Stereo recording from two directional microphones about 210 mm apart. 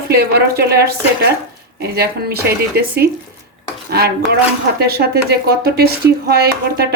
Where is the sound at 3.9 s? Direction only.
50° right (ahead or behind).